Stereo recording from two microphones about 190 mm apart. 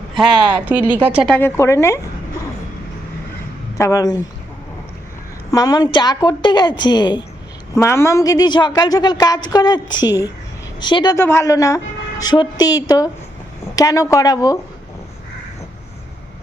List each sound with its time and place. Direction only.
0.2 s speech: 5° right (ahead or behind)
1.3 s a woman's voice: 10° left (ahead or behind)
3.8 s a woman's voice: 15° left (ahead or behind)
5.5 s a woman's voice: 20° left (ahead or behind)